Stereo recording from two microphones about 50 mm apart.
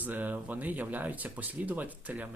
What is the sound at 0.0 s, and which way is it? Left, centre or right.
Speech, right.